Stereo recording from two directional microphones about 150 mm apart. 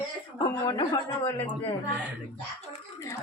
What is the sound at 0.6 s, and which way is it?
Speech, 30° left (ahead or behind).